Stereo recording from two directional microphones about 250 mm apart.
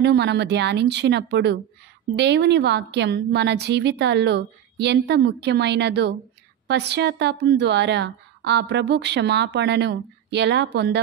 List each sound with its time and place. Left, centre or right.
0.0 s speech: right